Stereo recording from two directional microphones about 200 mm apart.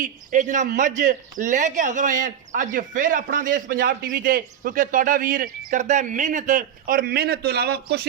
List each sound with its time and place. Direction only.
0.0 s a man's voice: 40° right (ahead or behind)